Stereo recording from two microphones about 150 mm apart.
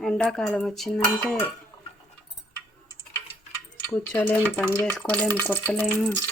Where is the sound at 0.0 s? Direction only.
5° left (ahead or behind).